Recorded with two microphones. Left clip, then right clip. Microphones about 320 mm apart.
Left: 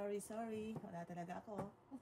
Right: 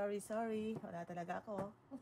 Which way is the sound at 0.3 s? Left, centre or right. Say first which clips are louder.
Right 6 dB; right.